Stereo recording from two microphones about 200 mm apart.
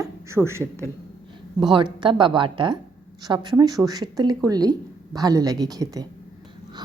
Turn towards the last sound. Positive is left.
turn(degrees=-20)  # may be behind; listen again after turning